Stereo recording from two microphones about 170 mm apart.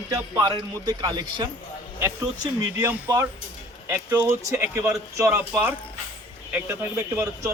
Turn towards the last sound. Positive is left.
turn(degrees=-15)  # may be behind; listen again after turning